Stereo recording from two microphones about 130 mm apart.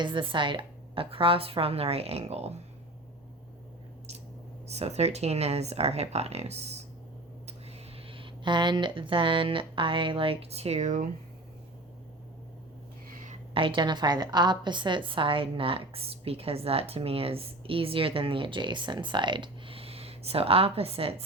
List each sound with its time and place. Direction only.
0.0 s a woman's voice: 40° right (ahead or behind); by 2.6 s 55° right (ahead or behind)
4.7 s a woman's voice: 55° right (ahead or behind)
8.1 s speech: 40° right (ahead or behind); by 11.1 s 70° right (ahead or behind)
13.5 s a woman's voice: 40° right (ahead or behind)